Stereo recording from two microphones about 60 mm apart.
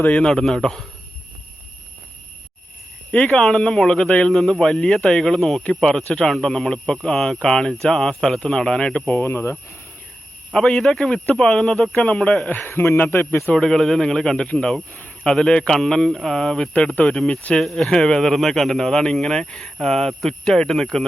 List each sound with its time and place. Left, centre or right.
0.1 s speech: centre
3.3 s speech: centre
9.1 s a man's voice: left
10.5 s speech: centre
11.9 s speech: left
12.5 s a man's voice: left
13.6 s speech: centre
16.7 s speech: centre
17.5 s speech: centre